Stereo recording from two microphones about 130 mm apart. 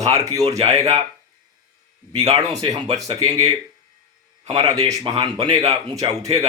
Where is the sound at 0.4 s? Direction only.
50° right (ahead or behind).